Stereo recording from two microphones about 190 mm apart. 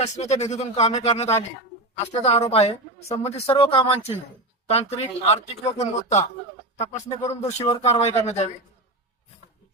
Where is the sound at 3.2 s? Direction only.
30° left (ahead or behind).